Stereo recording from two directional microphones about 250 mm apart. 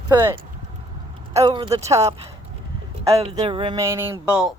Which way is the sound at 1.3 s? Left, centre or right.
Centre.